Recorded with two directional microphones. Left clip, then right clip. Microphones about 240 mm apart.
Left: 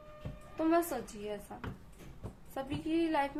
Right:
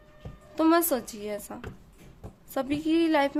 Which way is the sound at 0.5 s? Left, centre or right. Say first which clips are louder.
Right 8 dB; right.